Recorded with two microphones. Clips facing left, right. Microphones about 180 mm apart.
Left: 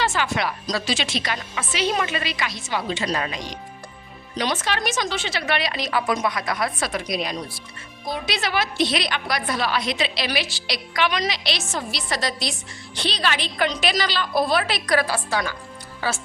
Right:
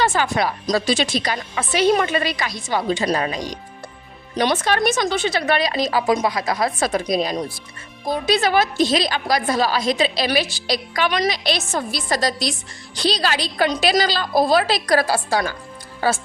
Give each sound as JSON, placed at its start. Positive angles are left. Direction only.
{"t": 0.0, "sound": "speech", "side_deg": -55}
{"t": 0.3, "sound": "a woman's voice", "side_deg": -40}
{"t": 4.4, "sound": "a woman's voice", "side_deg": -50}